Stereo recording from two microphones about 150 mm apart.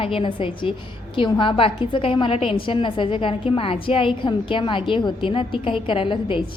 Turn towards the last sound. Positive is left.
turn(degrees=35)  # may be behind; listen again after turning